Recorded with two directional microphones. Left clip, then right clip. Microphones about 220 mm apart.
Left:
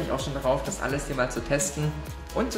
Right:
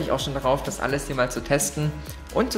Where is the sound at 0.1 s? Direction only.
30° right (ahead or behind).